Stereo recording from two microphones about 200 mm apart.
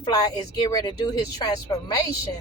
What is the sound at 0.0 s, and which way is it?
Speech, 20° left (ahead or behind).